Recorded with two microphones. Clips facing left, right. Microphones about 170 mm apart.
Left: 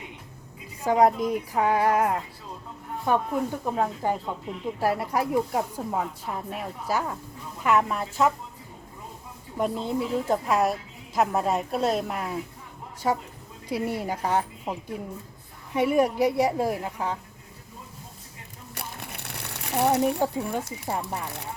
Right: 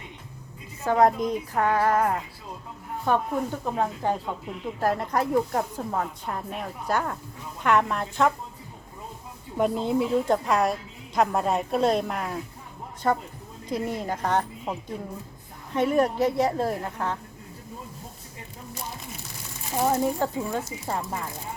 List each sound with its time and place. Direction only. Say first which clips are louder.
0.8 s speech: even; 10° left (ahead or behind)
3.0 s a woman's voice: even; centre (ahead or behind)
9.6 s a woman's voice: right 3 dB; centre (ahead or behind)
18.7 s crumpling: even; 65° left (ahead or behind)
20.1 s speech: left 1 dB; 15° left (ahead or behind)